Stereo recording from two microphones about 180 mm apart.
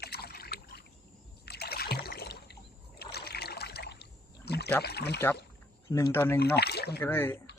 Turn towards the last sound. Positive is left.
turn(degrees=10)  # may be behind; listen again after turning